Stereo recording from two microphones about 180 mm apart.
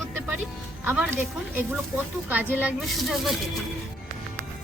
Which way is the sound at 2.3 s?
10° right (ahead or behind).